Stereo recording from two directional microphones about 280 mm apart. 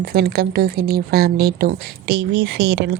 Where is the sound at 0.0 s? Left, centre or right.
Right.